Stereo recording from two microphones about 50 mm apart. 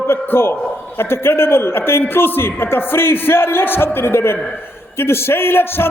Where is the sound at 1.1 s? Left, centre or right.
Left.